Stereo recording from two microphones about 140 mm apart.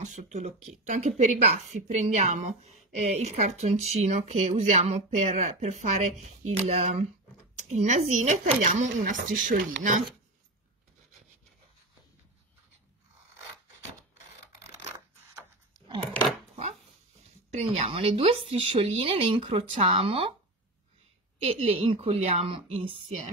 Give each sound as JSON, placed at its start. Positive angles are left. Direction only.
{"t": 0.0, "sound": "a woman's voice", "side_deg": -60}
{"t": 17.5, "sound": "speech", "side_deg": -45}
{"t": 21.4, "sound": "speech", "side_deg": -45}